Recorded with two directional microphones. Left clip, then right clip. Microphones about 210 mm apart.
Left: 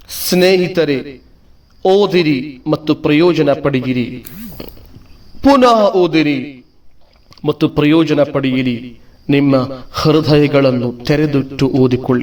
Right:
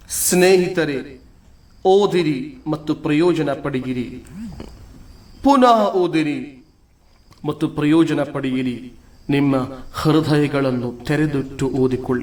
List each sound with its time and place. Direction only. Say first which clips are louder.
0.1 s a man's voice: left 3 dB; 30° left (ahead or behind)